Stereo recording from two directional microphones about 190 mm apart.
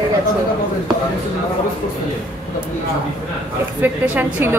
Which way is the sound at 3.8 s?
10° right (ahead or behind).